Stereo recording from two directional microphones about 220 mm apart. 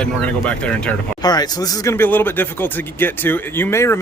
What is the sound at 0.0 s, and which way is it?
Speech, 5° left (ahead or behind).